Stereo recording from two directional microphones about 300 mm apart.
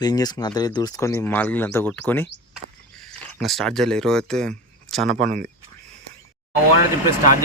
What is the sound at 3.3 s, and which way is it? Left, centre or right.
Speech, centre.